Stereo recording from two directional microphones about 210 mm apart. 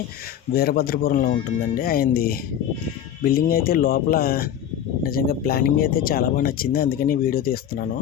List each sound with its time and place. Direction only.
0.5 s speech: 45° left (ahead or behind)